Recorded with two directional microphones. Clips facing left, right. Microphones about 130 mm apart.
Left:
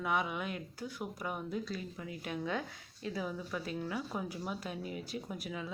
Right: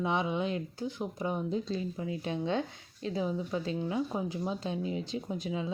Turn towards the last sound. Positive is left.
turn(degrees=-25)  # may be behind; listen again after turning